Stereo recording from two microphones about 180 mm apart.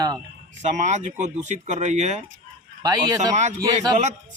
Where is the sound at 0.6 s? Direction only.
40° right (ahead or behind).